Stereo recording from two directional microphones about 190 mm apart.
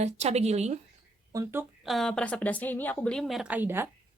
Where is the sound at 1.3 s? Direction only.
15° right (ahead or behind).